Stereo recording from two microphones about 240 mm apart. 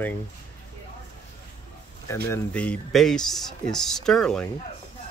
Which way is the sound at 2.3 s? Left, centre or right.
Centre.